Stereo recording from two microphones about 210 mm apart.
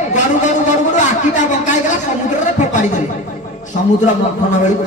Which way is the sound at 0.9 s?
35° left (ahead or behind).